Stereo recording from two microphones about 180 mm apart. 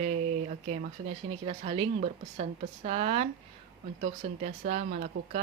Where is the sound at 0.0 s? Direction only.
40° right (ahead or behind).